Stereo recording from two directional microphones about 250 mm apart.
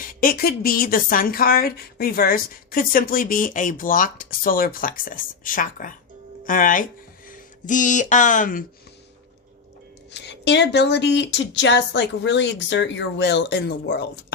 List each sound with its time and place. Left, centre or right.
0.0 s a woman's voice: left
10.1 s speech: left